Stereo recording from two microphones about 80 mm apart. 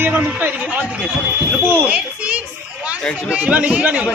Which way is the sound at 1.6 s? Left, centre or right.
Right.